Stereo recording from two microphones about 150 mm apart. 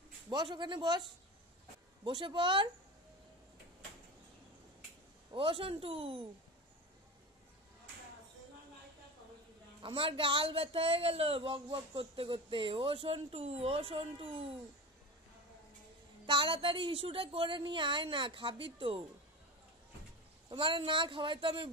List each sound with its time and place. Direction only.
0.3 s speech: 30° right (ahead or behind)
2.0 s speech: 35° right (ahead or behind)
5.3 s speech: 35° right (ahead or behind)
9.8 s speech: 35° right (ahead or behind)
16.3 s speech: 35° right (ahead or behind)
20.4 s speech: 35° right (ahead or behind)